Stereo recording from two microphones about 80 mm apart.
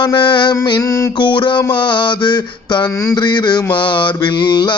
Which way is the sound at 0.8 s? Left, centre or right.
Left.